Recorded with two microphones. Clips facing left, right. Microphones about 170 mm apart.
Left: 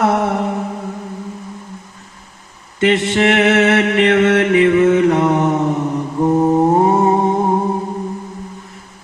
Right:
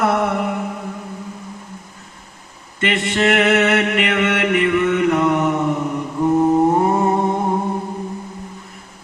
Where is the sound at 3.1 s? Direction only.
30° left (ahead or behind).